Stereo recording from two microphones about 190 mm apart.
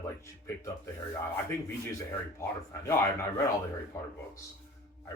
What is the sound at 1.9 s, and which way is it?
Speech, 15° left (ahead or behind).